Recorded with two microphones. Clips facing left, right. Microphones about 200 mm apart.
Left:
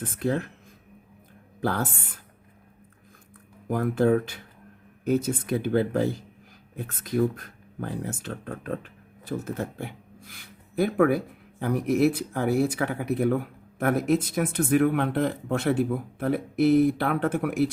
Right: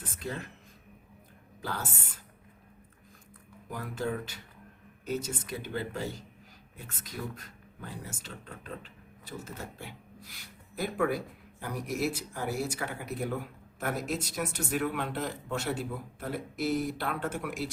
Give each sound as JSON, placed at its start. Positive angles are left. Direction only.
{"t": 0.0, "sound": "speech", "side_deg": 60}
{"t": 1.6, "sound": "speech", "side_deg": 60}
{"t": 3.7, "sound": "speech", "side_deg": 55}